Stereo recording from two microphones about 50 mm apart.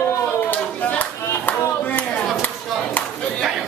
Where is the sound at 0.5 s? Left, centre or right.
Left.